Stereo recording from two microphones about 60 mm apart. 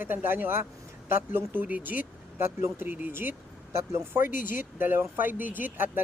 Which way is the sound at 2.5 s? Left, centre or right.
Right.